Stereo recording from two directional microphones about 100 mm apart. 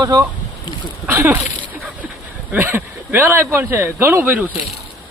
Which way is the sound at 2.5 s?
20° right (ahead or behind).